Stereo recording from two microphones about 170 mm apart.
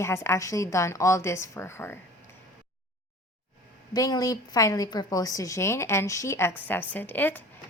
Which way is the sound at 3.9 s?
20° left (ahead or behind).